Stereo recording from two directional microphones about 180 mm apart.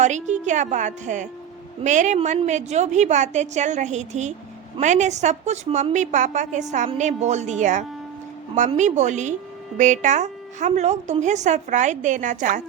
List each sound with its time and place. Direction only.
0.0 s a woman's voice: 40° right (ahead or behind)